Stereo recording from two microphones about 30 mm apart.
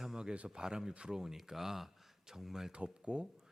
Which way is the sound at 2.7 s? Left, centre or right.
Right.